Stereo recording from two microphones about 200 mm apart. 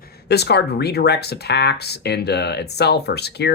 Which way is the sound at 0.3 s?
55° left (ahead or behind).